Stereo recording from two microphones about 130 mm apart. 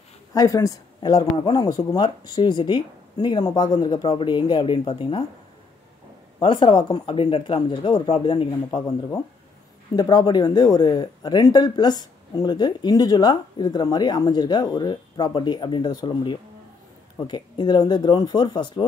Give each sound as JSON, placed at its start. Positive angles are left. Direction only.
{"t": 0.3, "sound": "speech", "side_deg": 25}
{"t": 6.4, "sound": "speech", "side_deg": 40}
{"t": 8.7, "sound": "speech", "side_deg": 30}